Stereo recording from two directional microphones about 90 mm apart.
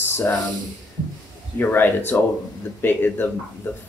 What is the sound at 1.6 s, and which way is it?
Speech, 25° left (ahead or behind).